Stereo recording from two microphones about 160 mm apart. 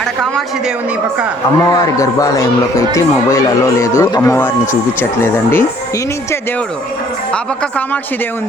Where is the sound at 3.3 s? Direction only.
20° left (ahead or behind).